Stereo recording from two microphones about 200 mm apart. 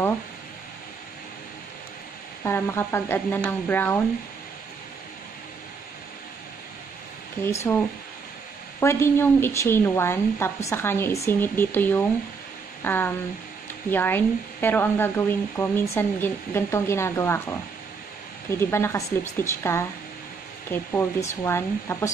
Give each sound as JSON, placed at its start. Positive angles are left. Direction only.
{"t": 2.4, "sound": "speech", "side_deg": 10}
{"t": 7.4, "sound": "speech", "side_deg": 10}
{"t": 18.6, "sound": "speech", "side_deg": 15}